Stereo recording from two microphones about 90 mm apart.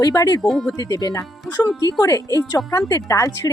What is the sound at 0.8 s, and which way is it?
Speech, 45° left (ahead or behind).